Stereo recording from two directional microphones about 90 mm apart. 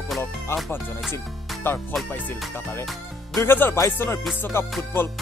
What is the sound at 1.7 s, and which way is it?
Speech, 25° left (ahead or behind).